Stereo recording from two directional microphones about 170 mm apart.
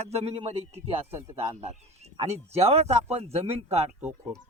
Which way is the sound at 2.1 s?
40° right (ahead or behind).